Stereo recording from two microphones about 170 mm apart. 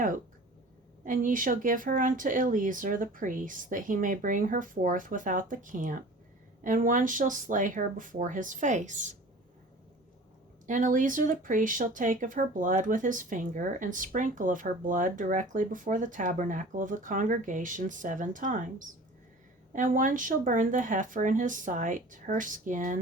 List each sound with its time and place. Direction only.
1.0 s speech: 50° right (ahead or behind)
10.7 s speech: 50° right (ahead or behind)